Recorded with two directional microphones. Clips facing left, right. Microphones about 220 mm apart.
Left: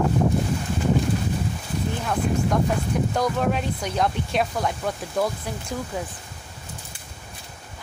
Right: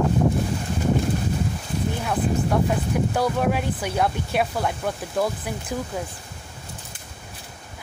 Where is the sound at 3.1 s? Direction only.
5° right (ahead or behind).